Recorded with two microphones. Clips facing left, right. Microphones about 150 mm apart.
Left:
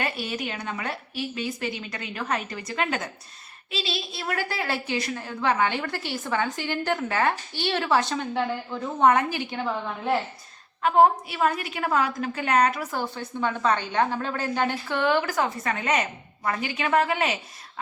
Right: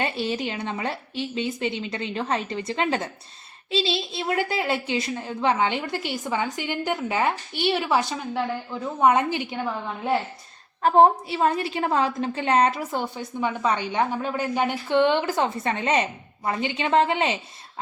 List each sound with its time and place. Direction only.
0.0 s a woman's voice: 25° right (ahead or behind)
10.8 s a woman's voice: 30° right (ahead or behind)